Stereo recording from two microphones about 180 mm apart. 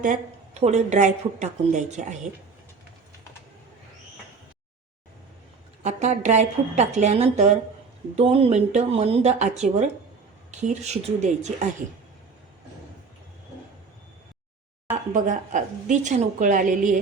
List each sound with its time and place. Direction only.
0.0 s a woman's voice: 40° right (ahead or behind)
5.8 s a woman's voice: 40° right (ahead or behind)
15.1 s a woman's voice: 45° right (ahead or behind)